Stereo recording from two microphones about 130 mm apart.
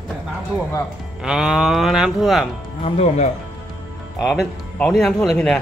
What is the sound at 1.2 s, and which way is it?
Cattle, 5° right (ahead or behind).